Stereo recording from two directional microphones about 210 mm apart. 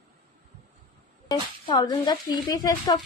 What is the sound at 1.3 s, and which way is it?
Speech, 20° left (ahead or behind).